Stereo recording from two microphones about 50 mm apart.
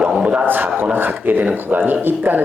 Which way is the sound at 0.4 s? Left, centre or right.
Right.